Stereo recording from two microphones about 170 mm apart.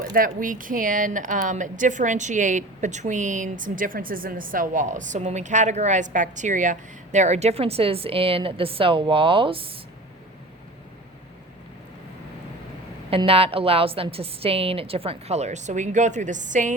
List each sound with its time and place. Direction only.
0.1 s speech: 55° right (ahead or behind); by 9.8 s 30° right (ahead or behind)
13.1 s a woman's voice: 35° right (ahead or behind)